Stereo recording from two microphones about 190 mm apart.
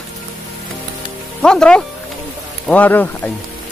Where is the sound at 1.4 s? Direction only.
5° left (ahead or behind).